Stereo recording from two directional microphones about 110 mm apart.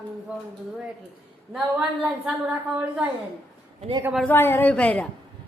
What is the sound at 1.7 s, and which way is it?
Speech, 15° right (ahead or behind).